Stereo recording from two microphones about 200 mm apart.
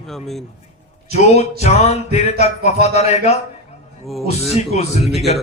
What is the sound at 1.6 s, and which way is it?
A man's voice, 35° left (ahead or behind).